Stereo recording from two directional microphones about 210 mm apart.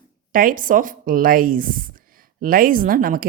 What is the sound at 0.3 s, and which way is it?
Speech, 40° right (ahead or behind).